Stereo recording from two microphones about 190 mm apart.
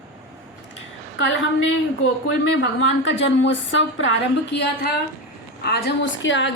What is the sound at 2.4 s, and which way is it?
A woman's voice, 70° left (ahead or behind).